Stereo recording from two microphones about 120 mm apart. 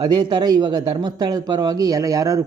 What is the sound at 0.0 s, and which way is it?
Speech, 40° right (ahead or behind).